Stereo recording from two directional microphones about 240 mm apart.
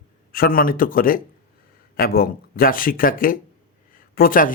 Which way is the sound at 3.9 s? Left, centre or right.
Left.